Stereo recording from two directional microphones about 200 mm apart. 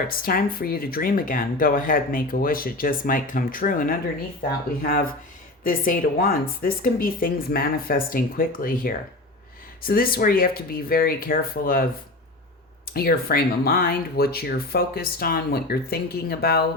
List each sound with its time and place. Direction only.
0.2 s speech: 45° left (ahead or behind)
12.9 s speech: 50° left (ahead or behind)